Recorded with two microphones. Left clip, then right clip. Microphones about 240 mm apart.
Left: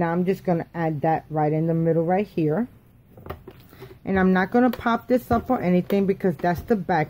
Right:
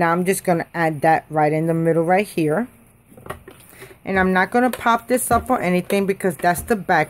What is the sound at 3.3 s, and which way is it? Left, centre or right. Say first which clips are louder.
A woman's voice: right 4 dB; centre.